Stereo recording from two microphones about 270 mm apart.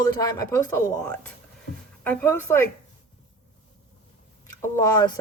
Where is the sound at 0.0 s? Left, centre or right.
Centre.